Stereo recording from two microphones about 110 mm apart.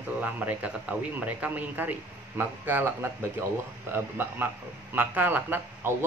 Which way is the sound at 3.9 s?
15° right (ahead or behind).